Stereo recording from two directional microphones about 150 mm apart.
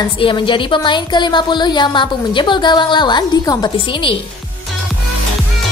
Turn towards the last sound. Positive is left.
turn(degrees=35)  # may be behind; listen again after turning